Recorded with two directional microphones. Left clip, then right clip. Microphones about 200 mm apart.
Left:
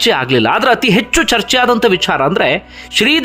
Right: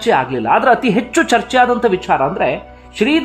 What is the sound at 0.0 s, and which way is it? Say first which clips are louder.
A man's voice: left 3 dB; 20° left (ahead or behind).